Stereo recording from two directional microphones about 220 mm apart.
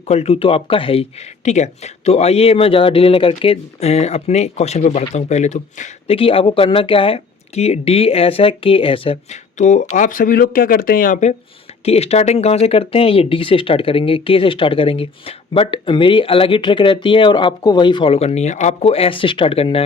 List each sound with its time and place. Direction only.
0.1 s speech: 30° left (ahead or behind)